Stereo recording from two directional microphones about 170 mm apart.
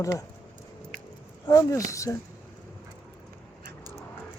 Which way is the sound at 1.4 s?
15° left (ahead or behind).